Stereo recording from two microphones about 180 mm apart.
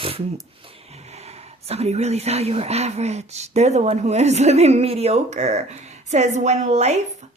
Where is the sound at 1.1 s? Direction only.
35° right (ahead or behind).